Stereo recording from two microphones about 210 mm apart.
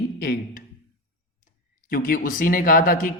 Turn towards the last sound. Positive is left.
turn(degrees=40)  # may be behind; listen again after turning